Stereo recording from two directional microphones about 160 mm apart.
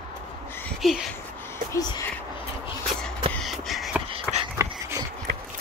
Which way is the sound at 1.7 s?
20° left (ahead or behind).